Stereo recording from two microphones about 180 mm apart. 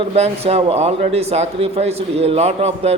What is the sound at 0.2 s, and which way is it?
Speech, 35° right (ahead or behind).